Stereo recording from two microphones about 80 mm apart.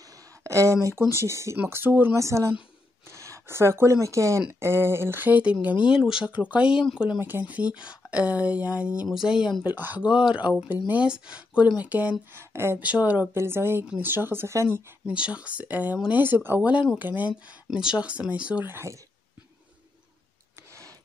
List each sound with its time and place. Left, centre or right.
0.4 s a sound: right
1.2 s speech: right
1.7 s speech: right
2.1 s speech: right; by 6.8 s centre
7.2 s speech: right
9.1 s speech: centre
9.6 s speech: right
12.8 s speech: centre
13.3 s speech: right
15.0 s speech: centre
17.6 s speech: centre
18.7 s speech: right